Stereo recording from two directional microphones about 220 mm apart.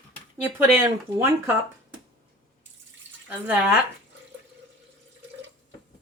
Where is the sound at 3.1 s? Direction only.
55° right (ahead or behind).